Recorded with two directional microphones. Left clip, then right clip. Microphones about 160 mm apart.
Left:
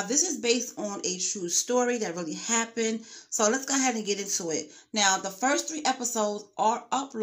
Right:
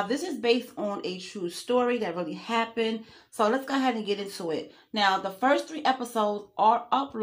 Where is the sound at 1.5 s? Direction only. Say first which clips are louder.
Right 1 dB; 45° left (ahead or behind).